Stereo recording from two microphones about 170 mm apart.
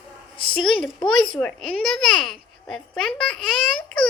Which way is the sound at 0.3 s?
30° left (ahead or behind).